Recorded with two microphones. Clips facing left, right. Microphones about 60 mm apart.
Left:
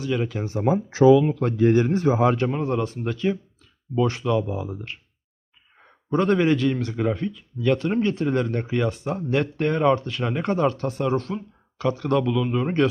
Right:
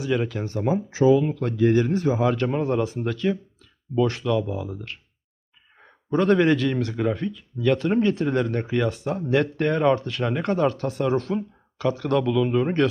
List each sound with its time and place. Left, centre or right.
0.0 s speech: centre
0.9 s speech: left
1.2 s speech: left
2.5 s speech: centre
3.1 s speech: centre
4.2 s speech: centre
5.8 s speech: centre